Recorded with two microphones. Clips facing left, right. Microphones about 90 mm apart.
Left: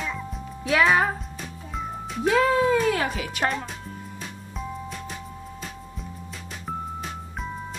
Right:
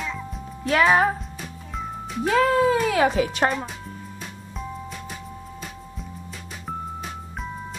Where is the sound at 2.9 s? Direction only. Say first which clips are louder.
Right 7 dB; 25° right (ahead or behind).